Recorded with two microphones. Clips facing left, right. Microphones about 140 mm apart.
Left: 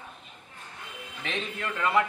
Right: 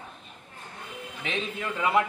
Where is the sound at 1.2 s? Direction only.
5° right (ahead or behind).